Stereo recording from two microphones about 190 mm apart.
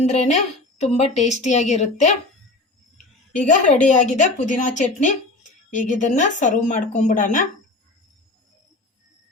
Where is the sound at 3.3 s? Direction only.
40° left (ahead or behind).